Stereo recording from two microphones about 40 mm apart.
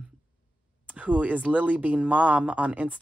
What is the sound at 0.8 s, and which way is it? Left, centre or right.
Speech, right.